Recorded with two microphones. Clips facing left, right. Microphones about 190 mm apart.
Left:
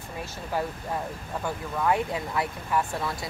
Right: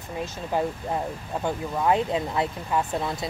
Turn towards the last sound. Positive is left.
turn(degrees=-20)  # may be behind; listen again after turning